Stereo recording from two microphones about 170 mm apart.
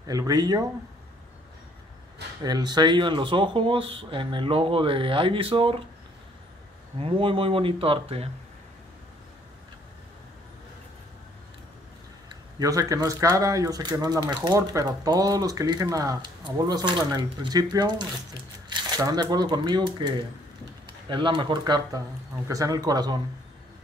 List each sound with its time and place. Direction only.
0.0 s speech: 20° right (ahead or behind)
2.4 s speech: 25° right (ahead or behind)
7.0 s speech: 30° right (ahead or behind)
12.5 s speech: 20° right (ahead or behind)